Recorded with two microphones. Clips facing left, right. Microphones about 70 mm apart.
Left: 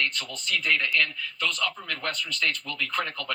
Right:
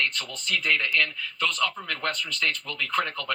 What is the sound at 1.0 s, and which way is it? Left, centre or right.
Speech, right.